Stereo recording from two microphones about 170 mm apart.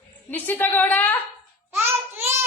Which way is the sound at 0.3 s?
10° left (ahead or behind).